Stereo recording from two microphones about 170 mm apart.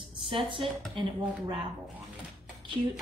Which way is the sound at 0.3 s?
30° right (ahead or behind).